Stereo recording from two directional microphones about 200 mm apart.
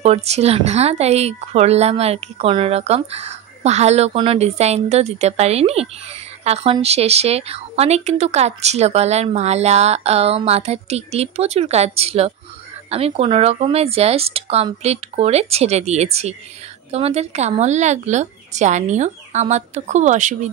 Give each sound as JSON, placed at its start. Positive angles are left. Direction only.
{"t": 0.0, "sound": "speech", "side_deg": -30}